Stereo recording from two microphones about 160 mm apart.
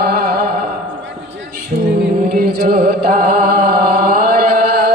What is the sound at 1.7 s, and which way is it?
Music, 60° right (ahead or behind).